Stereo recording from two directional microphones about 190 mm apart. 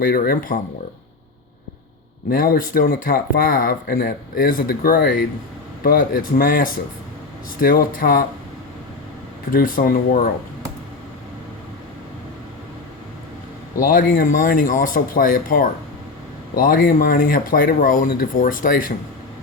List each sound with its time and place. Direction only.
0.0 s speech: 50° left (ahead or behind)
2.3 s speech: 50° left (ahead or behind)
9.5 s speech: 50° left (ahead or behind)
13.7 s speech: 45° left (ahead or behind)